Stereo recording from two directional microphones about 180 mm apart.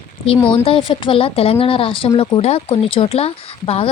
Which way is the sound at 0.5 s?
30° left (ahead or behind).